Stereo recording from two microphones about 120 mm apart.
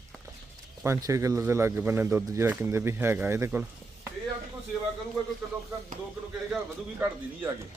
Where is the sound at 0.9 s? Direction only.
25° right (ahead or behind).